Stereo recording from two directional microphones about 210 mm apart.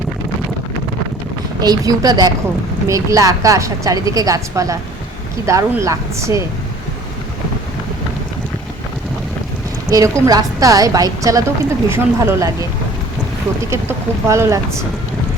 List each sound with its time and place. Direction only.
1.6 s a woman's voice: 15° right (ahead or behind)
9.9 s a woman's voice: 15° right (ahead or behind)
13.7 s a woman's voice: 15° right (ahead or behind)